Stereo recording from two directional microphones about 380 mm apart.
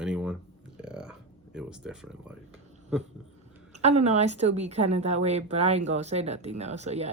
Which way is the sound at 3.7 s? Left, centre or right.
Centre.